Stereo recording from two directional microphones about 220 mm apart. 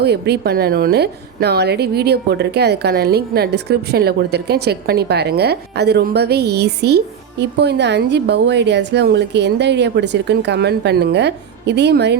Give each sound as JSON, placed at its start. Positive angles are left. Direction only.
{"t": 0.0, "sound": "a woman's voice", "side_deg": -50}